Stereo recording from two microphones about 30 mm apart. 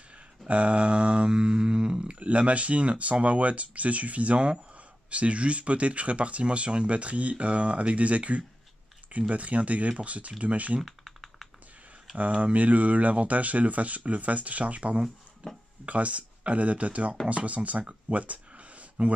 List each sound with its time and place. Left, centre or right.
0.5 s speech: right
2.1 s speech: right
4.4 s speech: right
10.9 s typing: centre
12.3 s speech: right
12.5 s speech: right